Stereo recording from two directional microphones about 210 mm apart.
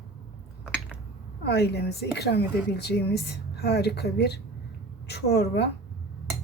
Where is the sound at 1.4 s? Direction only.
50° left (ahead or behind).